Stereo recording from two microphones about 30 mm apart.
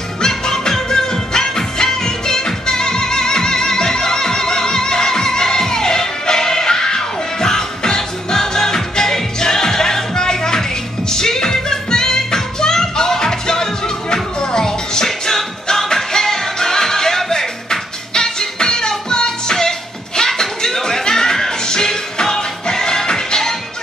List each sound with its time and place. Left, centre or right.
0.2 s music: centre